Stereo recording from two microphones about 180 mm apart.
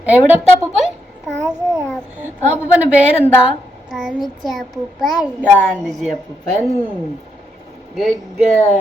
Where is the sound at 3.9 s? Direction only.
Centre (ahead or behind).